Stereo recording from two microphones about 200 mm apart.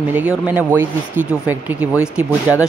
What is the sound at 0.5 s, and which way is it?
Speech, 10° right (ahead or behind).